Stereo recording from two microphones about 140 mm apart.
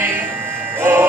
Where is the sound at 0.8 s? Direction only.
15° right (ahead or behind).